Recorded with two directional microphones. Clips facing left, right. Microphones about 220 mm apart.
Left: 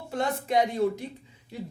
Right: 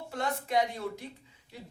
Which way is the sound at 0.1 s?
20° left (ahead or behind).